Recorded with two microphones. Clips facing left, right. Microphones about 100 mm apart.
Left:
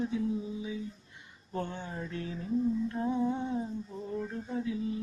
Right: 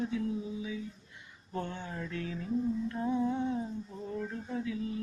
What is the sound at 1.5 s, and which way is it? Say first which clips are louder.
Speech: left 1 dB; 30° left (ahead or behind).